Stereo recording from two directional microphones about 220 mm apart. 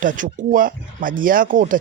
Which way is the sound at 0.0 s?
35° right (ahead or behind).